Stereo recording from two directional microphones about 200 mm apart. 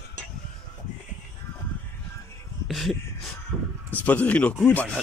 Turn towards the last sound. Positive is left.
turn(degrees=5)  # may be behind; listen again after turning